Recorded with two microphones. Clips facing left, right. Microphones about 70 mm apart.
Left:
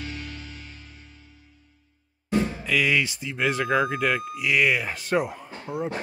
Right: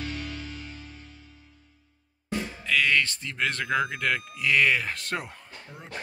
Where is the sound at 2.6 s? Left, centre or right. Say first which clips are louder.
Left 1 dB; centre.